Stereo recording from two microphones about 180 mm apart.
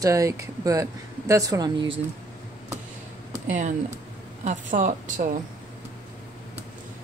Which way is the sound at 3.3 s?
45° right (ahead or behind).